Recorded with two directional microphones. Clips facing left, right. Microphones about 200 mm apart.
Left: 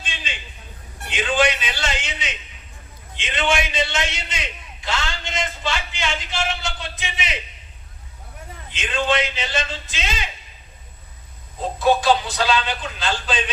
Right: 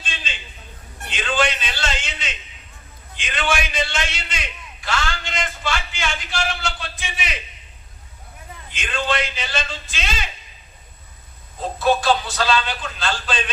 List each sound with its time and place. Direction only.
1.1 s a sound: 15° left (ahead or behind)
3.2 s a man's voice: 20° left (ahead or behind)
8.7 s a man's voice: 20° left (ahead or behind)
11.8 s a man's voice: 15° left (ahead or behind)